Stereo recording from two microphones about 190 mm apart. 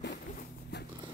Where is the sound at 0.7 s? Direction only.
60° left (ahead or behind).